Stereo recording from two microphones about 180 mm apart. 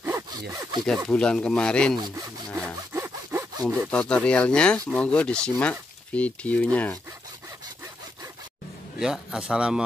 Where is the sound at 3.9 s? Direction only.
5° left (ahead or behind).